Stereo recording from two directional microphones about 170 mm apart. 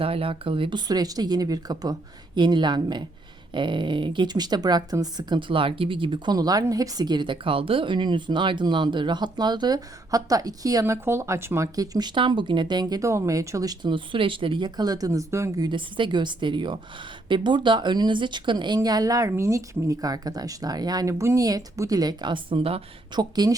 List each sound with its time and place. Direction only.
0.0 s speech: 35° right (ahead or behind)